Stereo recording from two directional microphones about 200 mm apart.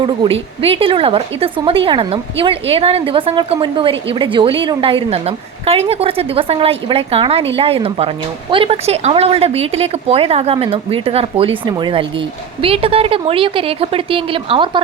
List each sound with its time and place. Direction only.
0.0 s a woman's voice: 25° right (ahead or behind)